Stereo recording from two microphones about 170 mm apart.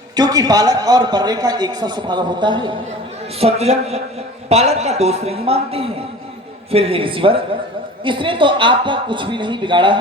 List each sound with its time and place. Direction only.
0.2 s a man's voice: 25° right (ahead or behind)
3.4 s a man's voice: 40° right (ahead or behind)